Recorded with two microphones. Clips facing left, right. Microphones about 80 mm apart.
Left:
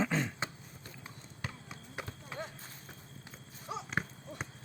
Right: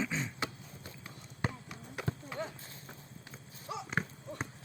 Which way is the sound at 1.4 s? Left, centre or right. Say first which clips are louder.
Right 7 dB; right.